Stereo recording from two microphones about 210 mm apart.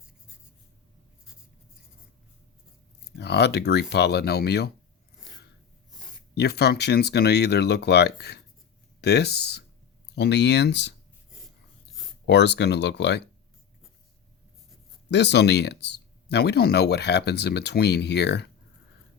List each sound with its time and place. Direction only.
3.2 s speech: 50° left (ahead or behind)
6.3 s speech: 50° left (ahead or behind)
12.2 s speech: 55° left (ahead or behind)
15.1 s speech: 55° left (ahead or behind)